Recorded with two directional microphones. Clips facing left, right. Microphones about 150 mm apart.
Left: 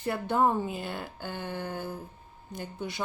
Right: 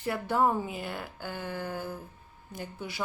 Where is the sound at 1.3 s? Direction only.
25° left (ahead or behind).